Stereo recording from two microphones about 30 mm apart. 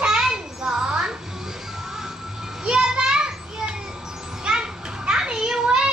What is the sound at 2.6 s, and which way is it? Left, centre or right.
Children playing, right.